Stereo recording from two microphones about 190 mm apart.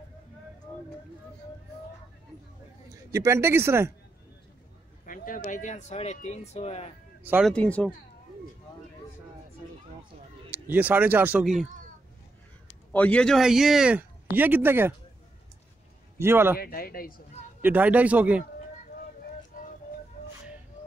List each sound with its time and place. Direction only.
3.1 s speech: 15° right (ahead or behind)
5.0 s speech: 45° left (ahead or behind)
7.2 s speech: 10° right (ahead or behind)
7.5 s speech: 5° left (ahead or behind)
10.5 s speech: 10° right (ahead or behind)
12.9 s speech: 5° left (ahead or behind); by 15.0 s 10° right (ahead or behind)
16.2 s speech: 10° right (ahead or behind)
16.5 s speech: 50° left (ahead or behind)
17.6 s speech: 10° right (ahead or behind)
20.2 s music: 50° left (ahead or behind)